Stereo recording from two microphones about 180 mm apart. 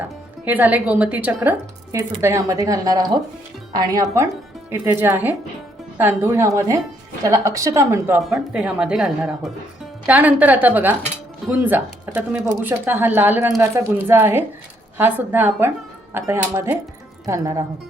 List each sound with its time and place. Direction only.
0.4 s a woman's voice: 10° right (ahead or behind)
8.3 s a woman's voice: 5° right (ahead or behind); by 17.6 s 20° right (ahead or behind)